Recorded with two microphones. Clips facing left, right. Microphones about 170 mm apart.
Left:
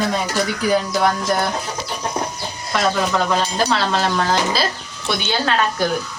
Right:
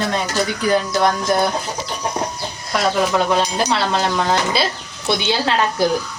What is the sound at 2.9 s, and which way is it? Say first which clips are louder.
Speech: right 2 dB; 15° right (ahead or behind).